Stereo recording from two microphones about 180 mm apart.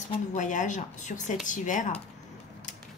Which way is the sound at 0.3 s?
45° left (ahead or behind).